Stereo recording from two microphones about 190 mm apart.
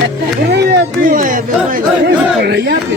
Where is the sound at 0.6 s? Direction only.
45° right (ahead or behind).